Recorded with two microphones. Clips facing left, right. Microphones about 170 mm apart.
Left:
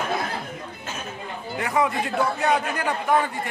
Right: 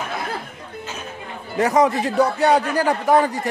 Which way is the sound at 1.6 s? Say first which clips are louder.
Right 7 dB; 40° right (ahead or behind).